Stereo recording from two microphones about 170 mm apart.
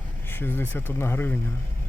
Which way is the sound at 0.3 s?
10° left (ahead or behind).